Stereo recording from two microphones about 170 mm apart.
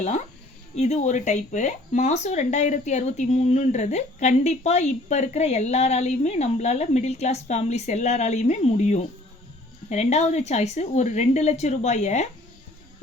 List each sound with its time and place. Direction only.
0.8 s speech: 40° left (ahead or behind)